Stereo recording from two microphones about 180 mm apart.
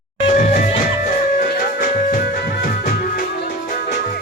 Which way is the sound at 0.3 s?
45° left (ahead or behind).